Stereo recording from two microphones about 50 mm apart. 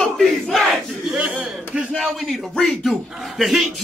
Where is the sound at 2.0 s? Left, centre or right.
Centre.